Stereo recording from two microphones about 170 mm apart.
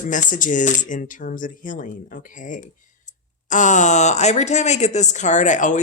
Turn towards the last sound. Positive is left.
turn(degrees=45)  # may be behind; listen again after turning